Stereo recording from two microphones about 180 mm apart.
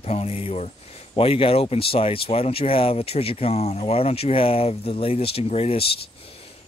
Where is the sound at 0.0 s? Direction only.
35° left (ahead or behind).